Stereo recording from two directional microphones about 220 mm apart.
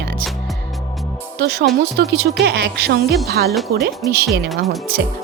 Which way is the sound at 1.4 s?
45° right (ahead or behind).